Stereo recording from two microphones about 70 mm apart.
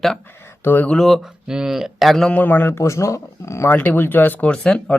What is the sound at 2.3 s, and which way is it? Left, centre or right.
Speech, left.